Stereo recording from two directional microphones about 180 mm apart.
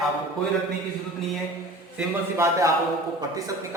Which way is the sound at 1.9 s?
15° right (ahead or behind).